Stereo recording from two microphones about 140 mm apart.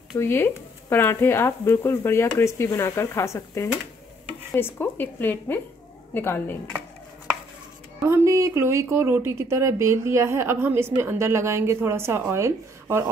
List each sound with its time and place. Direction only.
0.2 s speech: 15° left (ahead or behind)
8.1 s speech: 20° right (ahead or behind)